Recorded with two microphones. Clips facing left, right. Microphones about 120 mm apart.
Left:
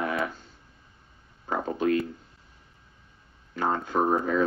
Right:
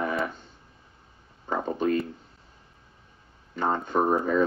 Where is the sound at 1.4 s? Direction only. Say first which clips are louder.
Even; centre (ahead or behind).